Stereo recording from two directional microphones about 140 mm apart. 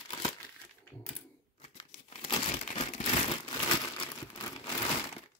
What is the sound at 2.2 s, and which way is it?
Crumpling, 45° left (ahead or behind).